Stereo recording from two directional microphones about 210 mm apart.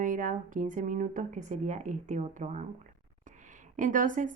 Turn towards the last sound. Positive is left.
turn(degrees=-35)  # may be behind; listen again after turning